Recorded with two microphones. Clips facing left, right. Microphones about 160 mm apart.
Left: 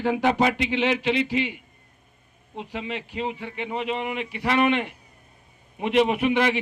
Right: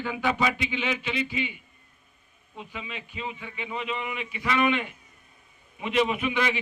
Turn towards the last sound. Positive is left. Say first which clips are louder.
# left 5 dB
turn(degrees=65)  # may be behind; listen again after turning